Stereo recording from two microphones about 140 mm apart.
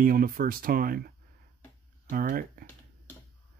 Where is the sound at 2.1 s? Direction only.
85° right.